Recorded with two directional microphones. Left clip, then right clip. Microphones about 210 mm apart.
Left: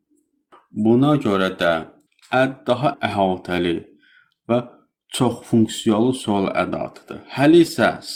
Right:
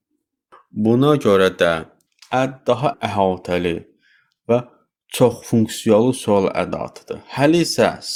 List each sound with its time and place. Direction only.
0.8 s speech: 50° right (ahead or behind)